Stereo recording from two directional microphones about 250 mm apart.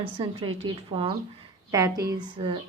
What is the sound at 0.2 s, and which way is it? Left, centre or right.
A woman's voice, centre.